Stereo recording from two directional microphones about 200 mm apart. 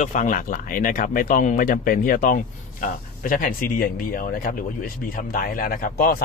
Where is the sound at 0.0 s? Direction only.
40° left (ahead or behind).